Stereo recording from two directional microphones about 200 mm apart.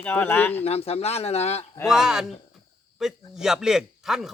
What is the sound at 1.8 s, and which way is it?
A man's voice, centre (ahead or behind).